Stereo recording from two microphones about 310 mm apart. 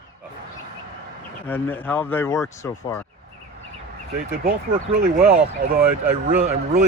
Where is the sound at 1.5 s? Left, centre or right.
Centre.